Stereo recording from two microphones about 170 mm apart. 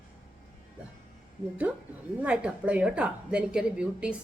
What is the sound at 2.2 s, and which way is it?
A woman's voice, 5° right (ahead or behind).